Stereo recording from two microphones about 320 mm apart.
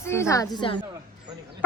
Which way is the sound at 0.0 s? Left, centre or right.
Centre.